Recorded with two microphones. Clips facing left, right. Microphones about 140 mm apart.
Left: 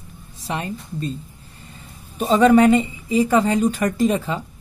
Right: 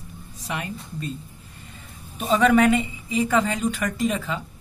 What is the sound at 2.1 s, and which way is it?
Speech, 35° left (ahead or behind).